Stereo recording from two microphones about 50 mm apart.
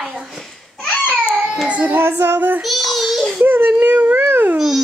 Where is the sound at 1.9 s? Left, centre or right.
Right.